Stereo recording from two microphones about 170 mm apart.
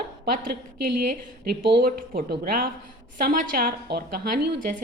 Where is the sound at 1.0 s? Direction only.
60° right (ahead or behind); by 1.9 s 80° right.